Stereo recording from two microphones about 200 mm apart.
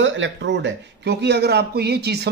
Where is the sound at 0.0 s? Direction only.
65° right (ahead or behind).